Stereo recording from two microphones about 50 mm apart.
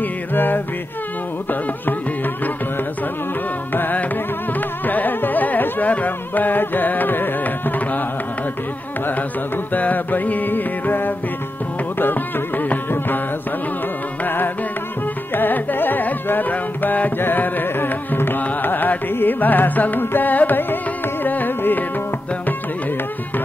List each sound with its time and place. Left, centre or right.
0.0 s music: left
3.7 s music: left
4.6 s carnatic music: left
9.7 s music: left
14.2 s carnatic music: left
17.2 s music: left
18.4 s carnatic music: left